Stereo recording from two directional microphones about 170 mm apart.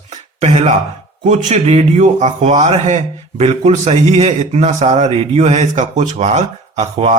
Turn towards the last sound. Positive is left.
turn(degrees=-40)  # may be behind; listen again after turning